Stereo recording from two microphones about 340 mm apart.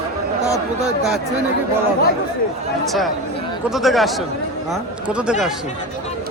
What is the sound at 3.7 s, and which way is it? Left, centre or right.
A man's voice, centre.